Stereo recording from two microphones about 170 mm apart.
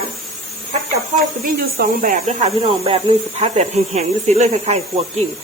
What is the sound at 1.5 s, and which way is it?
Speech, 55° right (ahead or behind).